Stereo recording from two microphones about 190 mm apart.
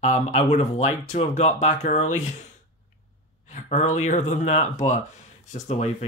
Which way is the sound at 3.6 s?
40° left (ahead or behind).